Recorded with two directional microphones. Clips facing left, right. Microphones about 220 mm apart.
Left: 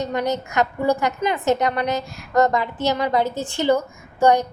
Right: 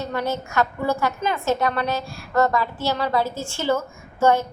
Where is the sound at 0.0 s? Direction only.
15° left (ahead or behind).